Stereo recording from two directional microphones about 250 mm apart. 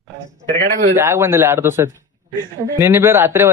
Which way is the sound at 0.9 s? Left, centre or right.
Centre.